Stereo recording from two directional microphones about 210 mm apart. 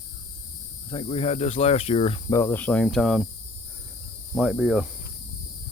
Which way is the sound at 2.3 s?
10° left (ahead or behind).